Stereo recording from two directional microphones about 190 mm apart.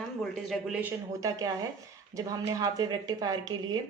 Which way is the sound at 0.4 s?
Centre (ahead or behind).